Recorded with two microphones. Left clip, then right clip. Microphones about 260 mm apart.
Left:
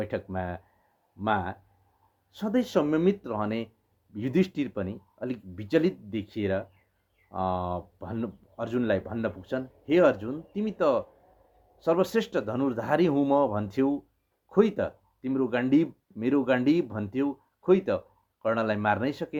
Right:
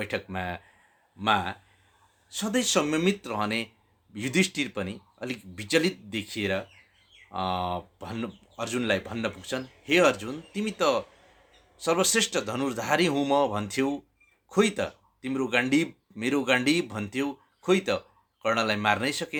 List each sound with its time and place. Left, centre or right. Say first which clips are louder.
0.0 s speech: right 1 dB; centre